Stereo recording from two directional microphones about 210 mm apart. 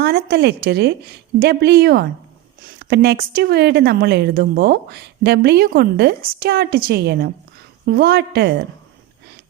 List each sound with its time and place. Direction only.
0.0 s speech: 45° right (ahead or behind)